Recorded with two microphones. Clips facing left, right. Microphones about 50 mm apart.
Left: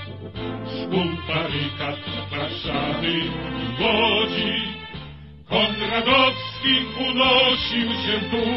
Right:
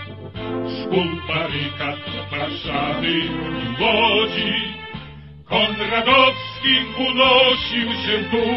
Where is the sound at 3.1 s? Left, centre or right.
Right.